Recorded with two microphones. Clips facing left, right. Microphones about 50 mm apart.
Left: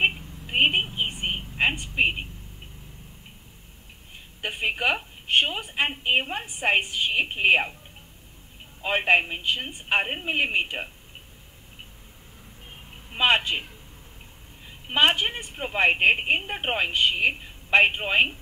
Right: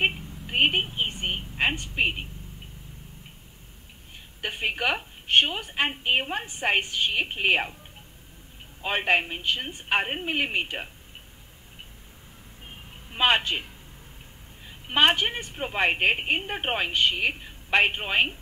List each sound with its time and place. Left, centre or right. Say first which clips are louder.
0.0 s a sound: left 2 dB; centre
1.0 s a woman's voice: left 1 dB; centre
4.4 s a woman's voice: left 1 dB; centre
8.8 s a woman's voice: left 3 dB; centre
13.1 s a woman's voice: left 1 dB; centre
15.3 s a woman's voice: left 1 dB; centre